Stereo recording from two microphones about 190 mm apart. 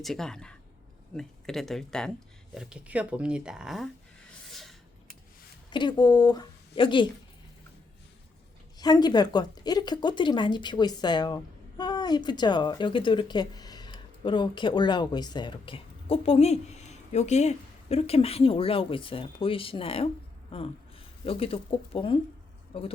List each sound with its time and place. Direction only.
0.0 s speech: centre (ahead or behind)
5.7 s a woman's voice: 25° left (ahead or behind)
8.8 s a woman's voice: 20° left (ahead or behind)
21.2 s a woman's voice: 30° left (ahead or behind)